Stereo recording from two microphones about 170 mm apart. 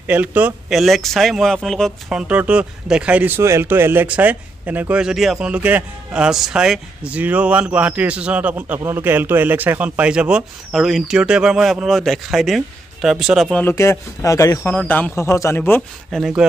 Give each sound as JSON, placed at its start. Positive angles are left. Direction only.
{"t": 0.0, "sound": "speech", "side_deg": -10}
{"t": 13.7, "sound": "speech", "side_deg": 15}
{"t": 16.2, "sound": "speech", "side_deg": 0}